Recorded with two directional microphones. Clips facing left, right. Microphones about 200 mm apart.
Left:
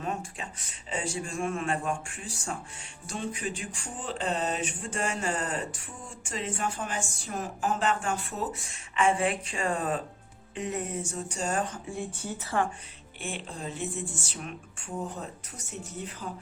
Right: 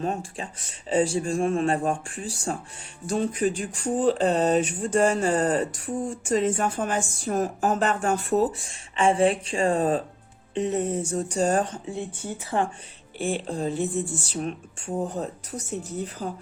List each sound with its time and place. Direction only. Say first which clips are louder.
0.0 s speech: right 5 dB; 35° right (ahead or behind)
11.9 s speech: right 2 dB; 20° right (ahead or behind)
13.1 s speech: right 10 dB; 35° right (ahead or behind)